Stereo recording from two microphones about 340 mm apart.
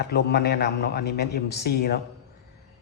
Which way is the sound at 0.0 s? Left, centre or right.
Left.